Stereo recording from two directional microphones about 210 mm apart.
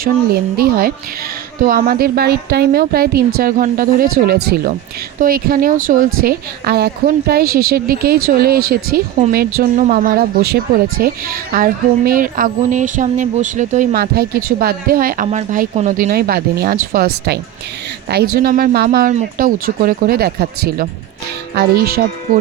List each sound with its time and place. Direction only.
0.0 s a woman's voice: 45° right (ahead or behind)
18.1 s speech: 45° right (ahead or behind)